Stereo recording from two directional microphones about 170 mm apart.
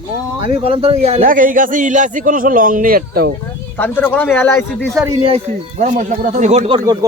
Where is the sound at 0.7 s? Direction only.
35° right (ahead or behind).